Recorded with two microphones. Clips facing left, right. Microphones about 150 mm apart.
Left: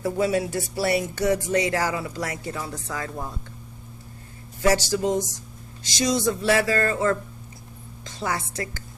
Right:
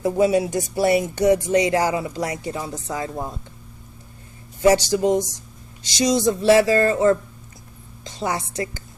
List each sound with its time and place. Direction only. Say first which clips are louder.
0.0 s speech: right 5 dB; 20° right (ahead or behind)
4.6 s speech: right 5 dB; 20° right (ahead or behind)